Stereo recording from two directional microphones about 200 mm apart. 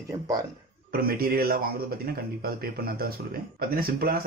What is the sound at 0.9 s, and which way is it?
A man's voice, 50° right (ahead or behind).